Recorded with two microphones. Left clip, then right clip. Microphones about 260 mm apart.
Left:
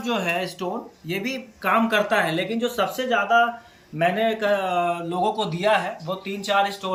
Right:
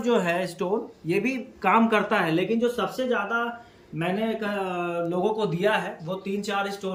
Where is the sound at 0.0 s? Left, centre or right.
Centre.